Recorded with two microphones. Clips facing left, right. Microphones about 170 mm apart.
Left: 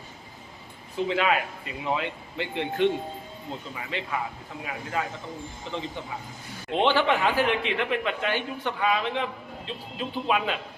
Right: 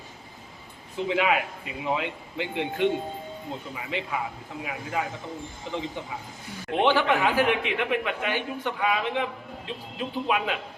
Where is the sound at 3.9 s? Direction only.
15° right (ahead or behind).